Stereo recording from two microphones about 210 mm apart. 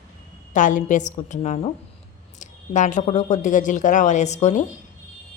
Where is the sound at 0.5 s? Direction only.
35° left (ahead or behind).